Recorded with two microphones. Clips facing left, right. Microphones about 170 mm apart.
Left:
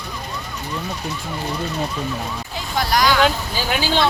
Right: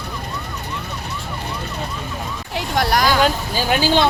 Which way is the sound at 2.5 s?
70° right (ahead or behind).